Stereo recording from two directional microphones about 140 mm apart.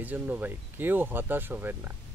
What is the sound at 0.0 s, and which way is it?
Speech, 10° right (ahead or behind).